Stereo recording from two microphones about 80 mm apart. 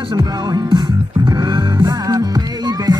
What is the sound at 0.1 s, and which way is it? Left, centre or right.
Music, right.